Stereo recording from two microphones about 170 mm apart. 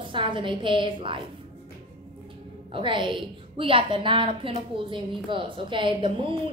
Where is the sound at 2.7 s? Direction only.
30° right (ahead or behind).